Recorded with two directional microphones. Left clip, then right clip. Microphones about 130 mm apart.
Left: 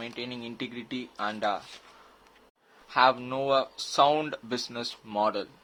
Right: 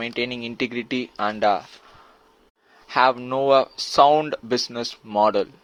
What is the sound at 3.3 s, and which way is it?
Speech, 45° right (ahead or behind).